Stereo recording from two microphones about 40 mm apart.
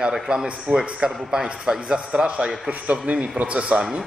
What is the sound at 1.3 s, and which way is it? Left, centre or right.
A man's voice, centre.